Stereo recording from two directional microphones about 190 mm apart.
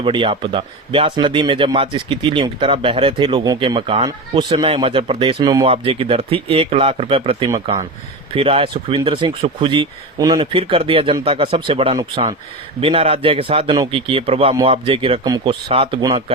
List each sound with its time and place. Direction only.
0.0 s speech: 25° right (ahead or behind)